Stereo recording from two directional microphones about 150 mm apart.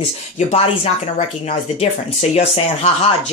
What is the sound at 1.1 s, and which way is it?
Speech, 45° left (ahead or behind).